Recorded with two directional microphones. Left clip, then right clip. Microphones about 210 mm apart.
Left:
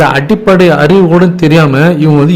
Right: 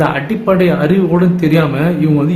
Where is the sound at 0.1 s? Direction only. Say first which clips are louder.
Left 6 dB; 50° left (ahead or behind).